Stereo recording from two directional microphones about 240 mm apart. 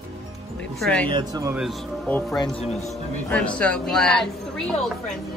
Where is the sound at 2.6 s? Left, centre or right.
Left.